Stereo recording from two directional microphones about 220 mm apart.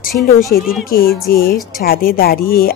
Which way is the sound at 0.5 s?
45° left (ahead or behind).